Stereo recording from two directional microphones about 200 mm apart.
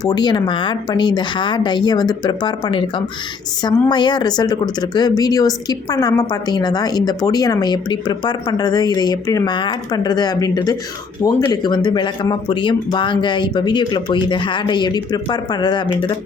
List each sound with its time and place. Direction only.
0.0 s speech: 20° left (ahead or behind)